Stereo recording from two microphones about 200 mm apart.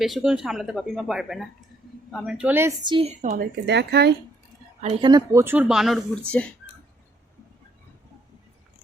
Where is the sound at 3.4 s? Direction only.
55° right (ahead or behind).